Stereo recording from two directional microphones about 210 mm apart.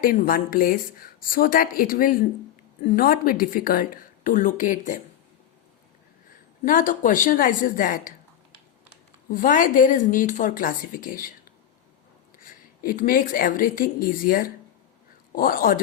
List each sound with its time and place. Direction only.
0.0 s speech: 40° left (ahead or behind)
6.7 s speech: 40° left (ahead or behind)
9.3 s speech: 40° left (ahead or behind)
12.4 s a woman's voice: 40° left (ahead or behind)